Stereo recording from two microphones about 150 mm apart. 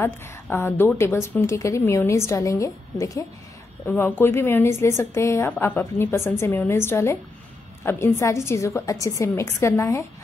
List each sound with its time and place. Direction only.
0.0 s a woman's voice: 15° left (ahead or behind)